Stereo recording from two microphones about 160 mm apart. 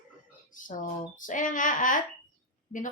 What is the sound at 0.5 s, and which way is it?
A woman's voice, 55° left (ahead or behind).